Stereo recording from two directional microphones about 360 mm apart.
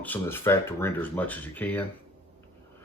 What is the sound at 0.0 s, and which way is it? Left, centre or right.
Speech, centre.